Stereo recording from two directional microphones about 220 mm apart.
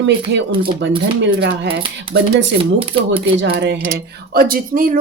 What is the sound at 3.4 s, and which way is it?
Speech, 50° right (ahead or behind).